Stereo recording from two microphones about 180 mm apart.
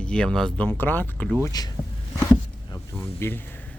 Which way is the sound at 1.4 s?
20° left (ahead or behind).